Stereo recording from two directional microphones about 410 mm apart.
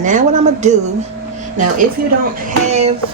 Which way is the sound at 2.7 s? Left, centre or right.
Centre.